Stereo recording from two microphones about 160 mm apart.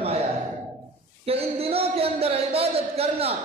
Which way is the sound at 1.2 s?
40° right (ahead or behind).